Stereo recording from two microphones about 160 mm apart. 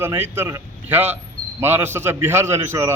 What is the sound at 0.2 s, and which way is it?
A man's voice, 15° right (ahead or behind).